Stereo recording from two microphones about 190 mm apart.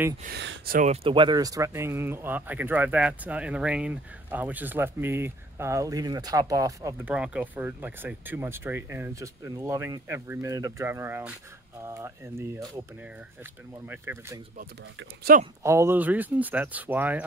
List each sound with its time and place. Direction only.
0.2 s speech: 60° right (ahead or behind)
1.0 s speech: 25° right (ahead or behind)
13.8 s speech: 10° right (ahead or behind)
15.3 s speech: 50° right (ahead or behind)
15.6 s speech: 15° right (ahead or behind)